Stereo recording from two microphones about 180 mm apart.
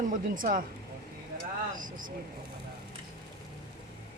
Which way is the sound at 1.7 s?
50° right (ahead or behind).